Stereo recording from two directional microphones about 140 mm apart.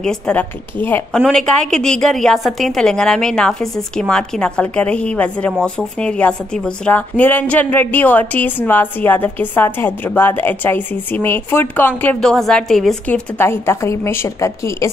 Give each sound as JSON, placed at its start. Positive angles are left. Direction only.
{"t": 0.0, "sound": "a woman's voice", "side_deg": 5}
{"t": 13.4, "sound": "a woman's voice", "side_deg": 15}